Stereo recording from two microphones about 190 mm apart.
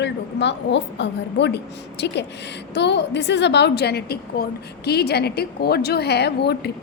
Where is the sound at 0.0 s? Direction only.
65° left (ahead or behind).